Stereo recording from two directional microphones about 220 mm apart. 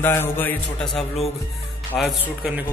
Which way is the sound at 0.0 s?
10° left (ahead or behind).